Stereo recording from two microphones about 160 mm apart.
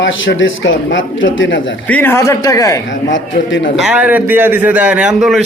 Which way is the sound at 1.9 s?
10° left (ahead or behind).